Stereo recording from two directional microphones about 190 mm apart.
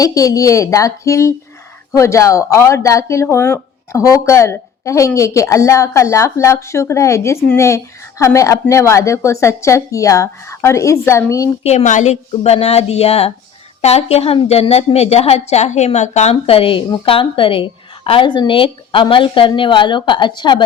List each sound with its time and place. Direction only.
0.0 s speech: 15° left (ahead or behind)
11.6 s a woman's voice: 35° left (ahead or behind)